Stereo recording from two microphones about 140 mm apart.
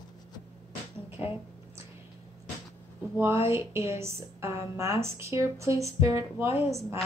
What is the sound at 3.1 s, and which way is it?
A woman's voice, 15° right (ahead or behind).